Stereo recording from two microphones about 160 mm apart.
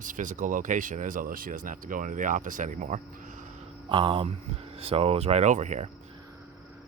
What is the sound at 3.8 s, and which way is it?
Speech, 30° right (ahead or behind).